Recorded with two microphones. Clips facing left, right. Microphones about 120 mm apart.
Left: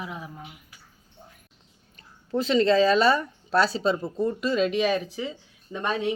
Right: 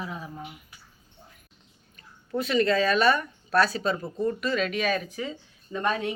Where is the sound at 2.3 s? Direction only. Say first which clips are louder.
Left 3 dB; 30° left (ahead or behind).